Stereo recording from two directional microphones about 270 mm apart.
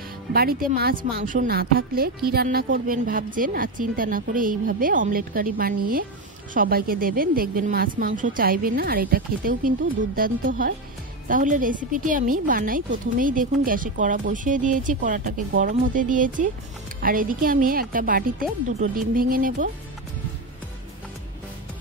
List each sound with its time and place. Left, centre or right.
0.3 s a woman's voice: right